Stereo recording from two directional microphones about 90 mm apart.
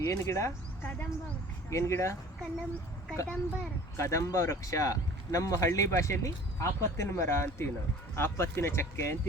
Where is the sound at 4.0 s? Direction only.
35° left (ahead or behind).